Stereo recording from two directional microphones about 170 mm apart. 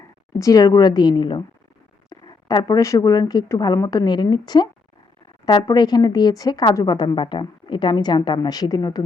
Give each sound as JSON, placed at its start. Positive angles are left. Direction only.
{"t": 0.3, "sound": "speech", "side_deg": 20}